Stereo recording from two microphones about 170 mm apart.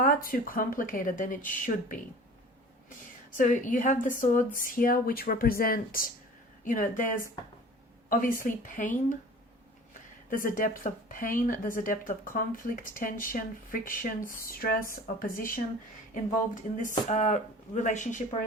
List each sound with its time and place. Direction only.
0.0 s speech: 55° left (ahead or behind)
3.3 s speech: 50° left (ahead or behind)
10.2 s speech: 55° left (ahead or behind)
16.7 s speech: 45° left (ahead or behind)